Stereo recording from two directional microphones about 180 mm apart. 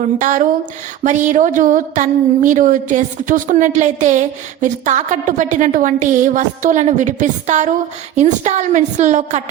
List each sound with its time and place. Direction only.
0.0 s a woman's voice: 45° right (ahead or behind)